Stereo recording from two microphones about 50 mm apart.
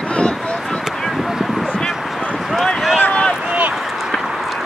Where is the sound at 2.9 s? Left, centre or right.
Left.